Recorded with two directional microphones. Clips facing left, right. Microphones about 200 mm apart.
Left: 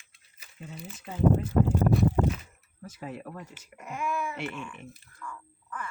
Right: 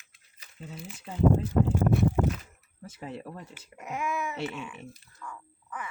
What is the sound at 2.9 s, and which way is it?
Speech, 25° right (ahead or behind).